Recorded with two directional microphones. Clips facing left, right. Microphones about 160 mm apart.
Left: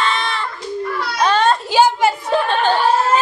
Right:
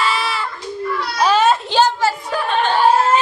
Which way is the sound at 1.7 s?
15° left (ahead or behind).